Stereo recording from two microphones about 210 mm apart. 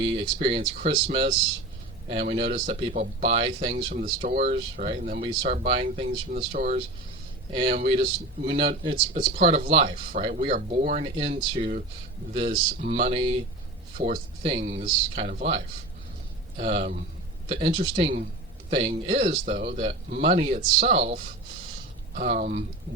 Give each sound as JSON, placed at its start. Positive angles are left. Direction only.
{"t": 0.4, "sound": "speech", "side_deg": -25}
{"t": 9.3, "sound": "speech", "side_deg": -40}